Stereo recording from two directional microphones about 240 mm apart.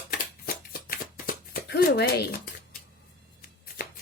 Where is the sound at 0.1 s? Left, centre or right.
Left.